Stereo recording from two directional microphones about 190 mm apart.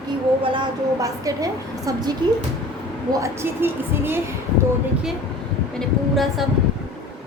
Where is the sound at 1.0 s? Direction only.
20° right (ahead or behind).